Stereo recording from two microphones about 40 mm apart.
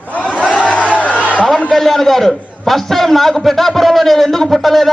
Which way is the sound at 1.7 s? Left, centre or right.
Centre.